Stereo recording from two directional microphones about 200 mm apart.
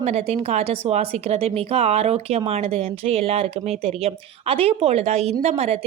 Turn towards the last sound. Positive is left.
turn(degrees=-35)  # may be behind; listen again after turning